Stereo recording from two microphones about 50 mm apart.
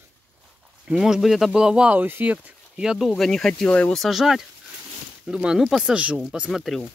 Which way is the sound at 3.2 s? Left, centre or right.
Centre.